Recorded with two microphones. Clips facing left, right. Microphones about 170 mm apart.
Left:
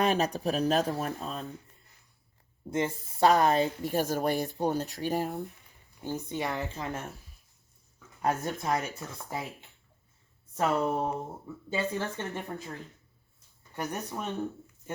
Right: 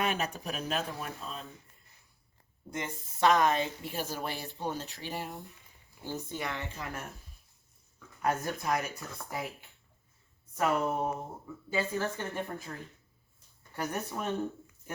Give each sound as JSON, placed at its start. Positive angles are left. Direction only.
{"t": 0.0, "sound": "speech", "side_deg": 35}
{"t": 2.6, "sound": "speech", "side_deg": 30}
{"t": 6.1, "sound": "speech", "side_deg": 20}
{"t": 8.2, "sound": "speech", "side_deg": 25}
{"t": 13.7, "sound": "speech", "side_deg": 20}